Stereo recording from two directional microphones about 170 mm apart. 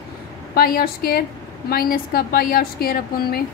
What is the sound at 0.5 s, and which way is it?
A woman's voice, 60° left (ahead or behind).